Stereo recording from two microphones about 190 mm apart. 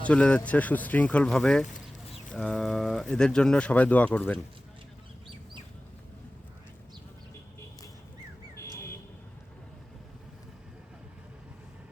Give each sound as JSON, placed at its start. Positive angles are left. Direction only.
{"t": 0.0, "sound": "speech", "side_deg": 5}
{"t": 1.6, "sound": "chicken", "side_deg": 40}
{"t": 2.3, "sound": "speech", "side_deg": 5}
{"t": 8.5, "sound": "bird", "side_deg": 15}